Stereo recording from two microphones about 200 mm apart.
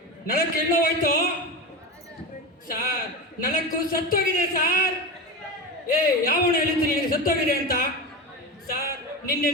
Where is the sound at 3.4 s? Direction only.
45° left (ahead or behind).